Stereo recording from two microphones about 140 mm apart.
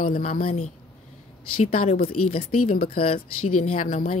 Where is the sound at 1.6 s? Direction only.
65° left (ahead or behind).